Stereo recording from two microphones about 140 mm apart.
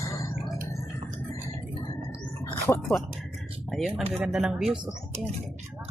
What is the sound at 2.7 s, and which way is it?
Speech, 10° left (ahead or behind).